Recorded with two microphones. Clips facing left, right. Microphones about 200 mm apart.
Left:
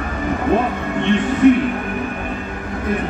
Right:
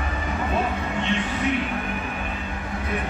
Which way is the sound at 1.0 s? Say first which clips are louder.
Left 14 dB; 50° left (ahead or behind).